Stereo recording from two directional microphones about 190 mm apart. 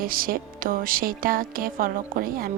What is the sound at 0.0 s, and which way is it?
Music, 50° right (ahead or behind).